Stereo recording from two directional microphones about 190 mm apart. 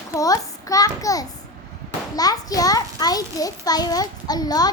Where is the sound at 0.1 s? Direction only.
20° left (ahead or behind).